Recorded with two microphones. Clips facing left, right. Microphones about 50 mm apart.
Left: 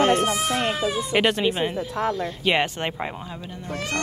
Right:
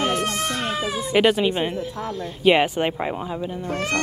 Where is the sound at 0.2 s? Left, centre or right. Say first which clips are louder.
Left 2 dB; centre.